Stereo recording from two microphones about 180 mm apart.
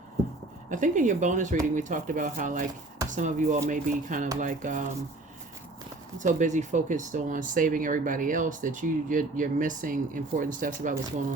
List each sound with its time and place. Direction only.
0.7 s speech: 45° right (ahead or behind)
6.1 s speech: 45° right (ahead or behind)